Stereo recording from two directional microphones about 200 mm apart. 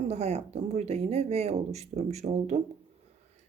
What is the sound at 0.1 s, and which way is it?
Speech, 35° right (ahead or behind).